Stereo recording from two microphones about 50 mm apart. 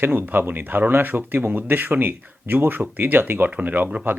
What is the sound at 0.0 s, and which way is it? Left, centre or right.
Speech, right.